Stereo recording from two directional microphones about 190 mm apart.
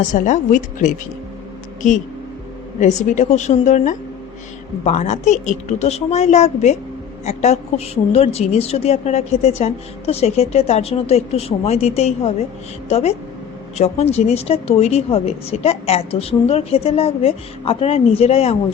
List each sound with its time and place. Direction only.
0.1 s a woman's voice: 40° left (ahead or behind)
2.8 s a woman's voice: 40° left (ahead or behind)